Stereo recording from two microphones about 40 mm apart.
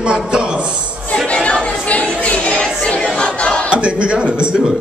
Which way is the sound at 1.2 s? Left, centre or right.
Left.